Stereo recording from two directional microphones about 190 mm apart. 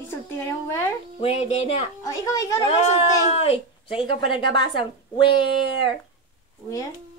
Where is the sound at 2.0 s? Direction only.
15° left (ahead or behind).